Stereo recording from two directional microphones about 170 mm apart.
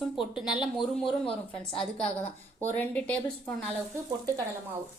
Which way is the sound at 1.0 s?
30° left (ahead or behind).